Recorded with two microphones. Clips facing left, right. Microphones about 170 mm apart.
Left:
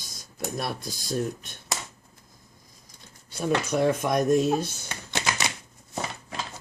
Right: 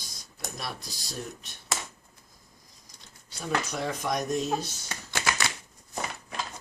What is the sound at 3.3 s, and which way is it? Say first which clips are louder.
Speech: left 6 dB; 55° left (ahead or behind).